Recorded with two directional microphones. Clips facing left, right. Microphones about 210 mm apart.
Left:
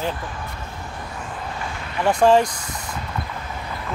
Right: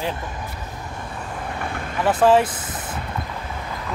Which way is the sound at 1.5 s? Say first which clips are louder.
Right 3 dB; 55° right (ahead or behind).